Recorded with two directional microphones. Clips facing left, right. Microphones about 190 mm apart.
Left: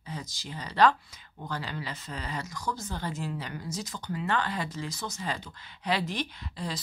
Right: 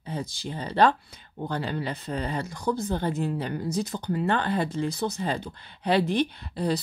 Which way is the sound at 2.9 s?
55° right (ahead or behind).